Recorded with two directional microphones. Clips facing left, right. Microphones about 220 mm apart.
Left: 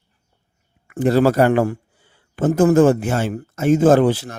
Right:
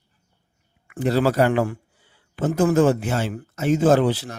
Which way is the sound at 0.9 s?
50° left (ahead or behind).